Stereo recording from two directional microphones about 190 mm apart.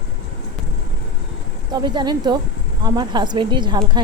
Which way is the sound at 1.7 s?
25° right (ahead or behind).